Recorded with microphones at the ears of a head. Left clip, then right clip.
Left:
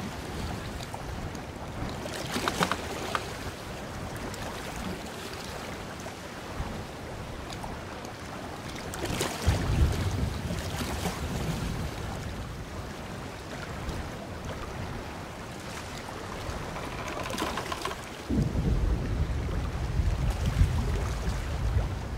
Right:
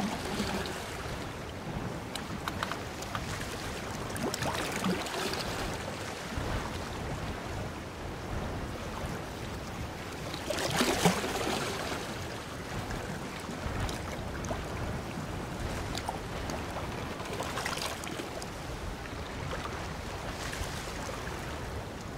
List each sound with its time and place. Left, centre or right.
2.3 s a sound: left
10.6 s boat: right
18.3 s thunder: left